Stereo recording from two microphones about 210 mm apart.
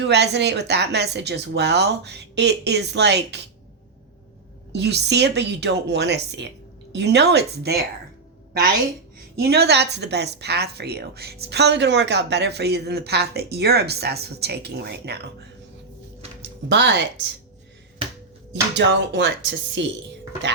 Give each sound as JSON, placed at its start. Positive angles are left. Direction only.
{"t": 0.0, "sound": "a woman's voice", "side_deg": -55}
{"t": 4.7, "sound": "a woman's voice", "side_deg": -55}
{"t": 9.4, "sound": "a woman's voice", "side_deg": -50}
{"t": 16.4, "sound": "a sound", "side_deg": -55}
{"t": 18.7, "sound": "speech", "side_deg": -55}